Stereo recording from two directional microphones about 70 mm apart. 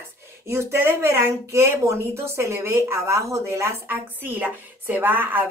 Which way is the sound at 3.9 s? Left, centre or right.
Right.